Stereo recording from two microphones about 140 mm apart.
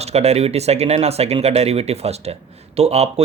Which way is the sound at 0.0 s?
50° right (ahead or behind).